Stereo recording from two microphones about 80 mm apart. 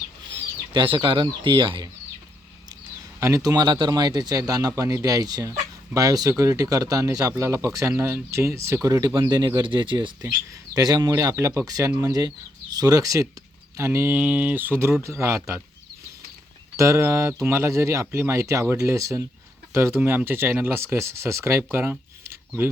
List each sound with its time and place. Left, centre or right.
0.3 s speech: right
3.2 s speech: right
9.6 s speech: right
10.8 s speech: right
11.1 s speech: right
12.7 s speech: right
14.1 s speech: centre; by 15.5 s right
16.7 s speech: right
19.7 s speech: right